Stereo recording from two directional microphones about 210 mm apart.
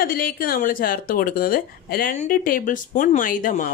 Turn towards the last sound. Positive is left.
turn(degrees=40)  # may be behind; listen again after turning